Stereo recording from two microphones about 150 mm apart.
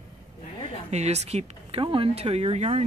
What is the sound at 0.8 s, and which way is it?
Speech, 45° right (ahead or behind).